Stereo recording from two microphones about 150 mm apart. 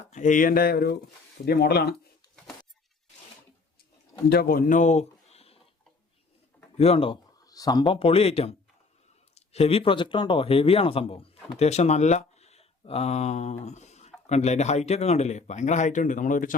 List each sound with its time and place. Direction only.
0.1 s speech: 55° left (ahead or behind); by 2.0 s 90° left
4.3 s speech: 80° left; by 5.5 s 45° left (ahead or behind)
6.7 s speech: 40° left (ahead or behind)
7.4 s speech: 25° left (ahead or behind)
7.9 s speech: 40° left (ahead or behind); by 16.6 s 60° left (ahead or behind)